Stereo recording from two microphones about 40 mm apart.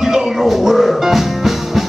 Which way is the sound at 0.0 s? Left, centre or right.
Centre.